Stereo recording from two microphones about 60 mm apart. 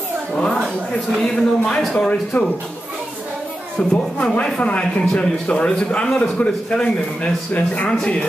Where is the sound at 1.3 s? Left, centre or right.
Centre.